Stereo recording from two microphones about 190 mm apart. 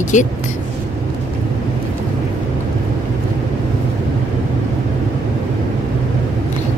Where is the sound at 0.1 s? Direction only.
40° left (ahead or behind).